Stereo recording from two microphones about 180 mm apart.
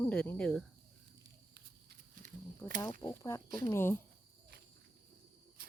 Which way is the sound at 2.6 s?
10° left (ahead or behind).